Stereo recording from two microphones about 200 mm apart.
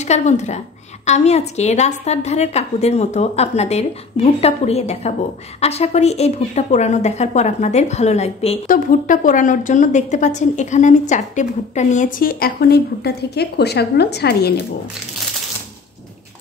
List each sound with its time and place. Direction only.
0.0 s a woman's voice: 35° left (ahead or behind); by 14.5 s 55° left (ahead or behind)